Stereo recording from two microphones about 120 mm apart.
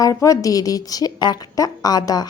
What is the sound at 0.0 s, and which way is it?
A woman's voice, 30° left (ahead or behind).